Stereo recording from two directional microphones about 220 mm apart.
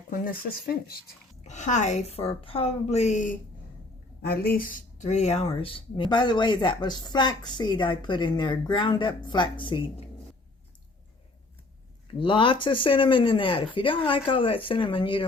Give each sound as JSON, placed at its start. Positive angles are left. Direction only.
{"t": 0.1, "sound": "speech", "side_deg": 40}
{"t": 12.2, "sound": "speech", "side_deg": 20}